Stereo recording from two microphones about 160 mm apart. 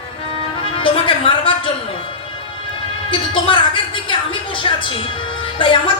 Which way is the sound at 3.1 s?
30° left (ahead or behind).